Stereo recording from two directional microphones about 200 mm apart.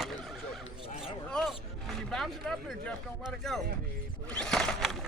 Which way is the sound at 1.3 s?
5° left (ahead or behind).